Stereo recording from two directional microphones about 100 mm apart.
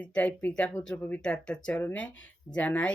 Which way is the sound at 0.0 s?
15° left (ahead or behind).